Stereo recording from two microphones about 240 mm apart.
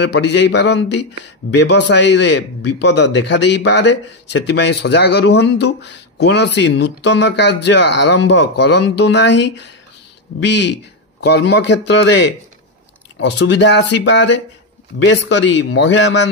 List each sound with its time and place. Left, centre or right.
0.0 s a man's voice: left